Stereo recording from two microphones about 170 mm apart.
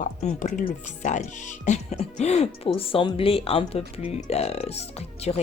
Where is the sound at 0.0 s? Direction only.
45° left (ahead or behind).